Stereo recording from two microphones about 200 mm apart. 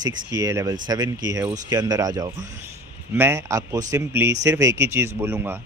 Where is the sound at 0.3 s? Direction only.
15° right (ahead or behind).